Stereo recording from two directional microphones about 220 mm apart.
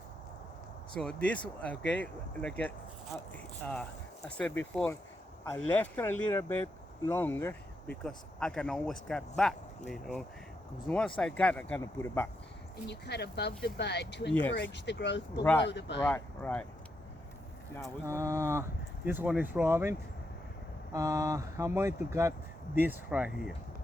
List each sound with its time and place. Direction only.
0.9 s a man's voice: 5° left (ahead or behind)
12.9 s speech: 50° left (ahead or behind)
16.0 s speech: 10° left (ahead or behind)
18.0 s speech: 10° right (ahead or behind)